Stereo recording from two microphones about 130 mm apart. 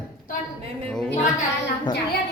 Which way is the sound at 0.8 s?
5° left (ahead or behind).